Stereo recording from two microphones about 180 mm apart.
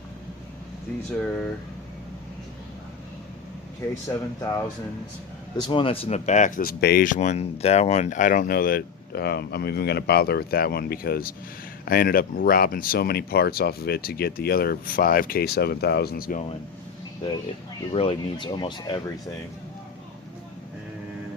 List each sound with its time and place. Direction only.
1.2 s speech: 5° left (ahead or behind)
5.5 s speech: 25° left (ahead or behind); by 16.4 s 55° left (ahead or behind)
17.9 s speech: 30° left (ahead or behind)